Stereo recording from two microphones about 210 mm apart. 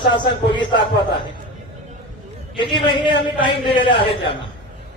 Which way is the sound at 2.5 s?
20° left (ahead or behind).